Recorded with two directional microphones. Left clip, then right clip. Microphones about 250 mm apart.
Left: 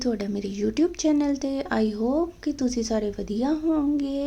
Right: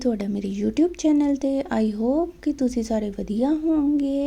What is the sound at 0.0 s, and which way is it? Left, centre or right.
A woman's voice, right.